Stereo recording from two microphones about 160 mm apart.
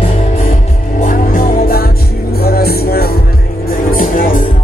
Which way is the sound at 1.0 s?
55° left (ahead or behind).